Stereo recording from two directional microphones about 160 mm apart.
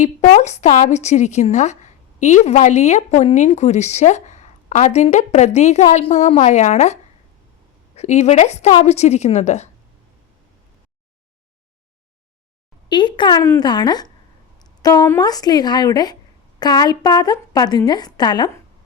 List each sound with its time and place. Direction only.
0.0 s a woman's voice: 45° left (ahead or behind)
12.9 s a woman's voice: 30° left (ahead or behind)